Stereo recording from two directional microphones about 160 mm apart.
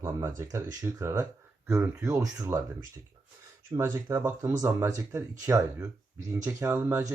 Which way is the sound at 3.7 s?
15° right (ahead or behind).